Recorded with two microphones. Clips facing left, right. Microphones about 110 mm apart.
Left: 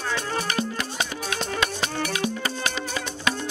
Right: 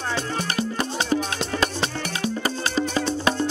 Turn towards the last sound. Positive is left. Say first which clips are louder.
# right 5 dB
turn(degrees=-30)  # may be behind; listen again after turning